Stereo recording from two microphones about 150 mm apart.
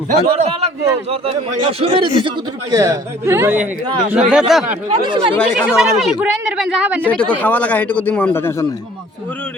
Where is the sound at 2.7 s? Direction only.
20° right (ahead or behind); by 4.6 s 5° right (ahead or behind).